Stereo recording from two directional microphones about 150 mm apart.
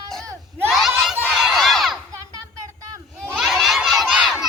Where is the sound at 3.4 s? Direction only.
Centre (ahead or behind).